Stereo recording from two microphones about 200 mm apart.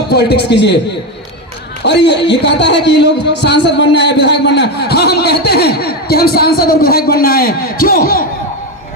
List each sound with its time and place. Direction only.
0.1 s a man's voice: 55° left (ahead or behind)
1.8 s a man's voice: 60° left (ahead or behind)